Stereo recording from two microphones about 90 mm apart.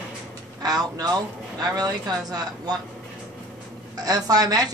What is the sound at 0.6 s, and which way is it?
Speech, 45° right (ahead or behind).